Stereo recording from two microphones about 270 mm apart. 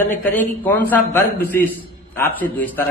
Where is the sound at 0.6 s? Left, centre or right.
Centre.